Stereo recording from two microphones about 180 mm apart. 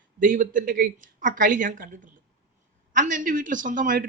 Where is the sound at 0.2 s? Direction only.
50° right (ahead or behind).